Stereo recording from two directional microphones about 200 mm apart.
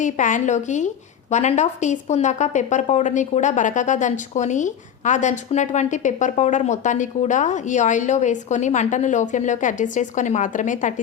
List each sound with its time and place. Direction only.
0.0 s speech: 40° left (ahead or behind)